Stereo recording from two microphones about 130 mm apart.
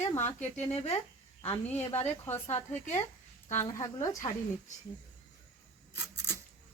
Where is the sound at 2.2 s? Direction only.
20° left (ahead or behind).